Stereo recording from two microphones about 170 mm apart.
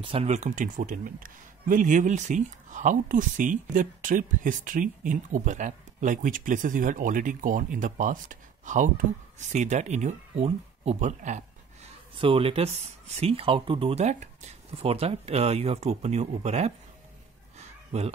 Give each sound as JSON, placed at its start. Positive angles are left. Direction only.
{"t": 0.0, "sound": "speech", "side_deg": -35}
{"t": 12.2, "sound": "speech", "side_deg": -35}
{"t": 17.6, "sound": "a sound", "side_deg": -40}